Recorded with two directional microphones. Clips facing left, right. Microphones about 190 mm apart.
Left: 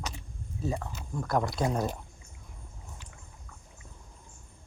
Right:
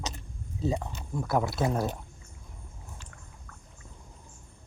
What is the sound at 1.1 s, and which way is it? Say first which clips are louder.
Speech: right 1 dB; 5° right (ahead or behind).